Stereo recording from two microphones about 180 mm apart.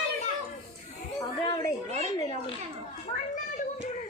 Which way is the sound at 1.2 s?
25° left (ahead or behind).